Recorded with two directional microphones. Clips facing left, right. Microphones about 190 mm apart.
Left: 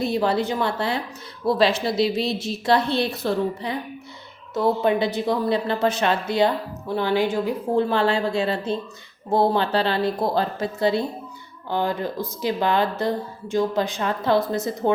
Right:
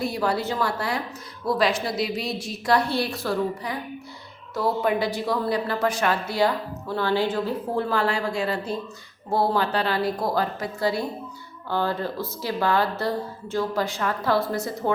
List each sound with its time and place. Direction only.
0.0 s a woman's voice: 25° left (ahead or behind)